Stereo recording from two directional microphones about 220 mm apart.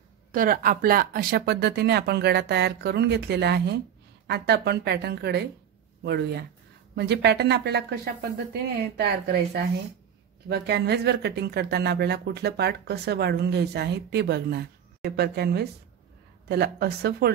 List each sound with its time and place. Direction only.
0.3 s speech: 40° right (ahead or behind)